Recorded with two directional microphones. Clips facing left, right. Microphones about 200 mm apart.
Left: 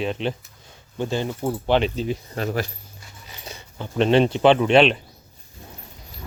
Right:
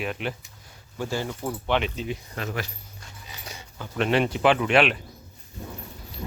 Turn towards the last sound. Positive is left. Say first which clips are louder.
# left 5 dB
turn(degrees=25)  # may be behind; listen again after turning